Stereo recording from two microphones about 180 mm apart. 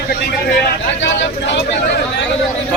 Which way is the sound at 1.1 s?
85° left.